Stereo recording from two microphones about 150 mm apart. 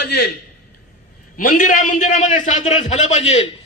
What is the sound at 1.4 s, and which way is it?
A man's voice, 65° left (ahead or behind).